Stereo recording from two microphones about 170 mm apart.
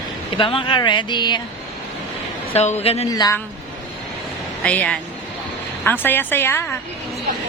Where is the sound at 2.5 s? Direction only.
40° left (ahead or behind).